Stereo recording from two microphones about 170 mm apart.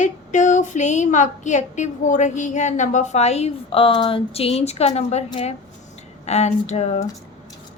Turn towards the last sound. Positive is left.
turn(degrees=40)  # may be behind; listen again after turning